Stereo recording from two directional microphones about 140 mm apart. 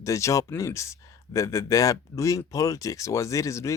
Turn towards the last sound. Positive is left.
turn(degrees=20)  # may be behind; listen again after turning